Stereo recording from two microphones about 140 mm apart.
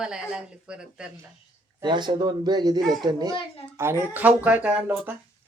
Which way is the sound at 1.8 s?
35° right (ahead or behind).